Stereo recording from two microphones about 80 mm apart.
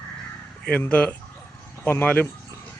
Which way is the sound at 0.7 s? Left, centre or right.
Centre.